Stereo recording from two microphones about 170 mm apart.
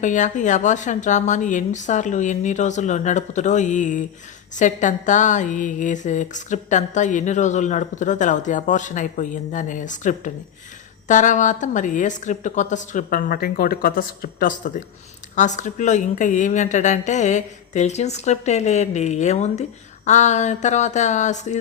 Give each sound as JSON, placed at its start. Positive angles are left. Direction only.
{"t": 0.0, "sound": "speech", "side_deg": 45}
{"t": 15.4, "sound": "speech", "side_deg": 45}